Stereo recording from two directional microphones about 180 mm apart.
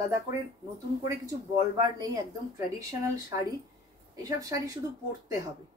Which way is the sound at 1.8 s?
20° right (ahead or behind).